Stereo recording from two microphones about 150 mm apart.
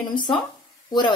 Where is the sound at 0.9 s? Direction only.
30° left (ahead or behind).